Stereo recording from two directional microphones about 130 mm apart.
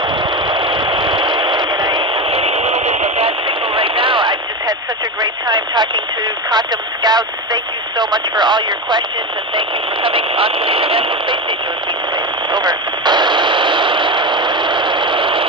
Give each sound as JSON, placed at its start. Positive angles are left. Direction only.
{"t": 0.5, "sound": "a sound", "side_deg": -40}
{"t": 2.4, "sound": "radio", "side_deg": -55}
{"t": 3.8, "sound": "a sound", "side_deg": -40}
{"t": 5.2, "sound": "radio", "side_deg": -30}
{"t": 9.6, "sound": "speech", "side_deg": -45}
{"t": 12.5, "sound": "radio", "side_deg": -35}